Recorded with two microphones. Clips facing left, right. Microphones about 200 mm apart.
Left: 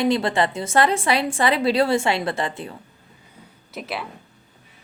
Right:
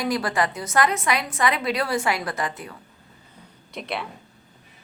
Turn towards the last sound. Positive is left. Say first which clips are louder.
# even
turn(degrees=5)  # may be behind; listen again after turning